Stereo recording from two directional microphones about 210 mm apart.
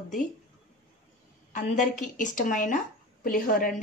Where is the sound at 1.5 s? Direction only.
35° left (ahead or behind).